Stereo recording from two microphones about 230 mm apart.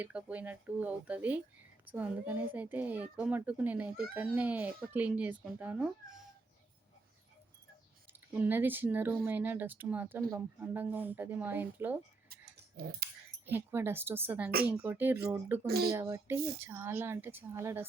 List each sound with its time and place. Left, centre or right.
0.0 s speech: centre
8.4 s speech: centre
12.3 s a sound: right
13.4 s speech: centre
15.6 s speech: right
15.9 s speech: centre